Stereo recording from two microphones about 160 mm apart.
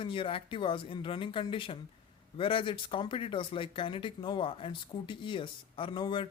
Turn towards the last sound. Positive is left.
turn(degrees=30)  # may be behind; listen again after turning